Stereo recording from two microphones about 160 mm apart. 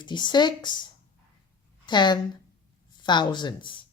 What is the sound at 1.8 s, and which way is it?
A woman's voice, 30° left (ahead or behind).